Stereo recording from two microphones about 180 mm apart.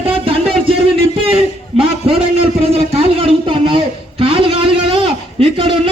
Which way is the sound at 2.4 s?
35° right (ahead or behind).